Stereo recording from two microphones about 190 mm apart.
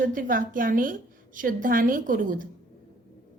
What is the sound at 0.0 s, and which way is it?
A woman's voice, 45° right (ahead or behind).